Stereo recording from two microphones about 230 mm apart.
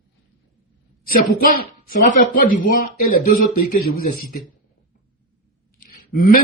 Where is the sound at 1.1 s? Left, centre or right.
Left.